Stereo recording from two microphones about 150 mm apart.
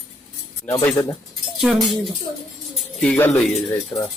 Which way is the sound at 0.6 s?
15° left (ahead or behind).